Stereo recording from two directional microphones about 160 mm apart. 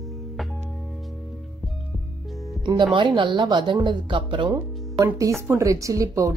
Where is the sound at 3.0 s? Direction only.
30° right (ahead or behind).